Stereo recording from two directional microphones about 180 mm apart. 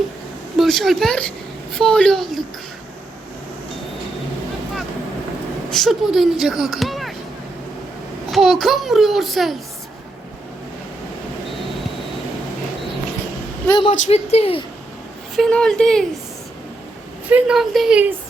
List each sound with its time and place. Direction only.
0.6 s speech: centre (ahead or behind)
5.7 s speech: centre (ahead or behind)
8.3 s speech: centre (ahead or behind)
13.7 s a woman's voice: 25° left (ahead or behind)
15.4 s speech: 5° left (ahead or behind)
17.2 s speech: 5° right (ahead or behind)